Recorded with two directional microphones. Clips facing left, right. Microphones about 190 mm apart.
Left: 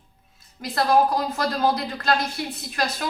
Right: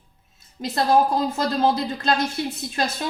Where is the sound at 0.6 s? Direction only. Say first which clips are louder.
Right 1 dB; 25° right (ahead or behind).